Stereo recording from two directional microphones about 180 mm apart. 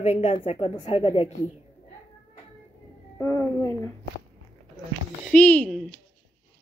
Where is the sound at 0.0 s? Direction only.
40° left (ahead or behind).